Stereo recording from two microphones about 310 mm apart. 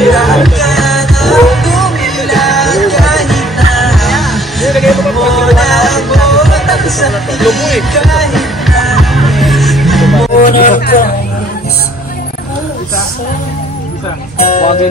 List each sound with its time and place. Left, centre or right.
0.0 s music: centre
10.3 s music: left
14.5 s music: left